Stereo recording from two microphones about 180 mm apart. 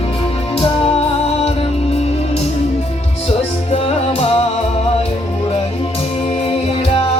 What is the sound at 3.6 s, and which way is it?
Music, 35° left (ahead or behind).